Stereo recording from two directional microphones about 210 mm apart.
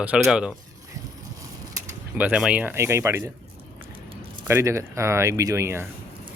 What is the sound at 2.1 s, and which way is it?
Speech, 5° right (ahead or behind).